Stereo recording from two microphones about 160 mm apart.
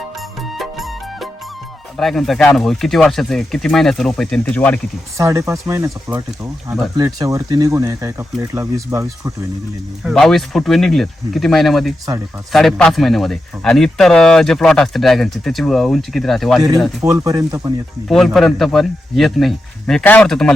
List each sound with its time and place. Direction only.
0.4 s music: centre (ahead or behind)
2.0 s speech: centre (ahead or behind)
5.1 s speech: 20° right (ahead or behind)
10.0 s speech: centre (ahead or behind)
17.0 s speech: 20° right (ahead or behind)
18.3 s speech: centre (ahead or behind)